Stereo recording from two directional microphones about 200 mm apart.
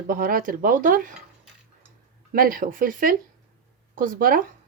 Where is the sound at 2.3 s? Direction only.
45° right (ahead or behind).